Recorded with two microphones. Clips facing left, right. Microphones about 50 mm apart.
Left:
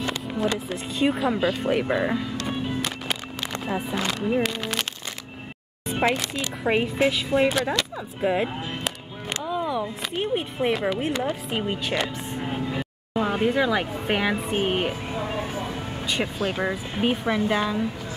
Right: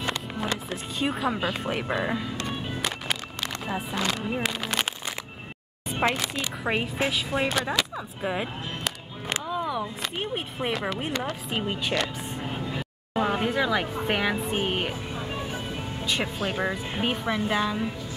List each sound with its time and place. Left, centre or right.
0.0 s speech: centre
3.6 s speech: centre
5.9 s speech: centre
11.6 s speech: centre
12.4 s music: centre
13.1 s speech: centre
16.1 s speech: centre